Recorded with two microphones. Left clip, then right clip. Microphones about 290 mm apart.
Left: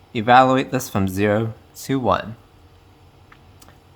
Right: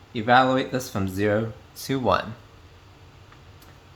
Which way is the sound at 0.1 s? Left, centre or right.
Left.